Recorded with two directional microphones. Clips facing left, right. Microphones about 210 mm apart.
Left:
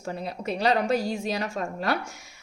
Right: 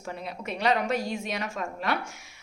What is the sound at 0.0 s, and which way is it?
A woman's voice, 35° left (ahead or behind).